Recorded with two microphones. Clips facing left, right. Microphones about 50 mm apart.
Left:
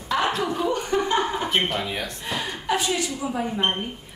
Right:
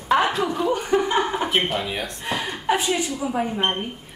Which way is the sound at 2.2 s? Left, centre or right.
Centre.